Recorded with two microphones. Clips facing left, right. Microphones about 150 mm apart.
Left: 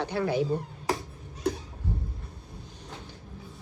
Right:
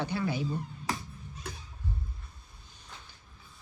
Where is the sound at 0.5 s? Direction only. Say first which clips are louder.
Left 5 dB; 35° left (ahead or behind).